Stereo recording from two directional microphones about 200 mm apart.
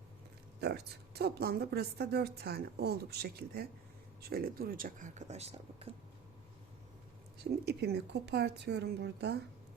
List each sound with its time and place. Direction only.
0.6 s a woman's voice: 55° right (ahead or behind); by 5.9 s 30° right (ahead or behind)
7.5 s a woman's voice: 55° right (ahead or behind)